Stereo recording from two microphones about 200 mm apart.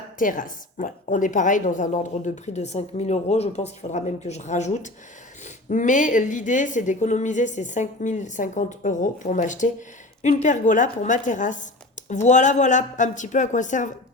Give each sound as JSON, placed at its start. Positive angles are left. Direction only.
{"t": 0.2, "sound": "a woman's voice", "side_deg": 40}